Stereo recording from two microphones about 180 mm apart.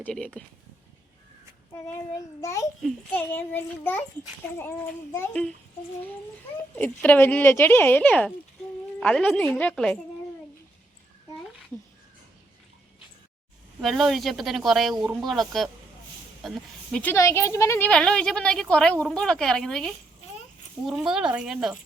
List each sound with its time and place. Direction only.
0.0 s speech: 5° left (ahead or behind)
2.1 s speech: 15° left (ahead or behind)
5.1 s speech: 10° left (ahead or behind)
6.7 s speech: 10° left (ahead or behind)
13.8 s speech: centre (ahead or behind)
14.9 s speech: 25° right (ahead or behind)
15.3 s speech: centre (ahead or behind)